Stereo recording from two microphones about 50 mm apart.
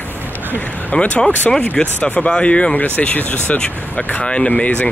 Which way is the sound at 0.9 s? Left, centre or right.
Left.